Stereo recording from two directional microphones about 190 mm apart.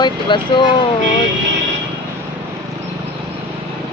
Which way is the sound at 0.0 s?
25° left (ahead or behind).